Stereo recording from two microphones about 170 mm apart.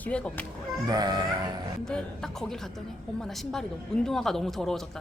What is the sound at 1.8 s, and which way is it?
A woman's voice, 5° left (ahead or behind).